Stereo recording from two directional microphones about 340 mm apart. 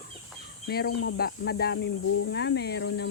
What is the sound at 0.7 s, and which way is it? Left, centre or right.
Speech, left.